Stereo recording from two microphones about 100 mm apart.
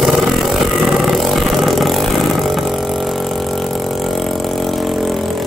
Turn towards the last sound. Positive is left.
turn(degrees=0)  # may be behind; listen again after turning